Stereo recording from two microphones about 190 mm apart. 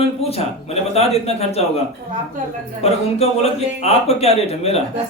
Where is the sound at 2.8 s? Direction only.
35° left (ahead or behind).